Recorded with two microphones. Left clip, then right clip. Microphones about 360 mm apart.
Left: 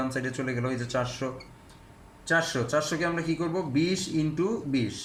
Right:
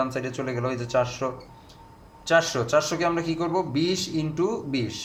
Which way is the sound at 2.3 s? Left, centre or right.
Right.